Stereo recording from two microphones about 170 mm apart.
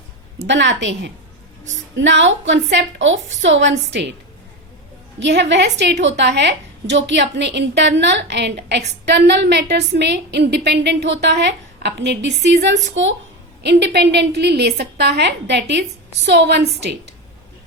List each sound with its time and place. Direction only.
0.4 s a woman's voice: 90° right
5.2 s a woman's voice: 90° right